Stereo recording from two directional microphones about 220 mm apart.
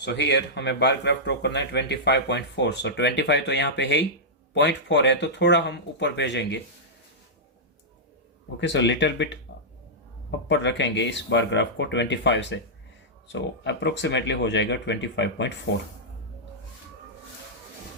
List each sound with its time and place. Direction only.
0.0 s speech: 50° left (ahead or behind)
8.6 s speech: 55° left (ahead or behind)
10.5 s speech: 55° left (ahead or behind)